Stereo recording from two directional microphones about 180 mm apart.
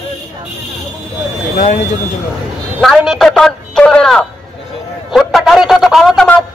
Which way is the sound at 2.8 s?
Centre (ahead or behind).